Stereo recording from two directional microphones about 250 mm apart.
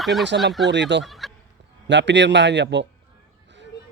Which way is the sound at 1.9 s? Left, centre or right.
Right.